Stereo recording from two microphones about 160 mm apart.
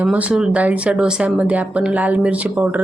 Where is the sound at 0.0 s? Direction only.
10° right (ahead or behind).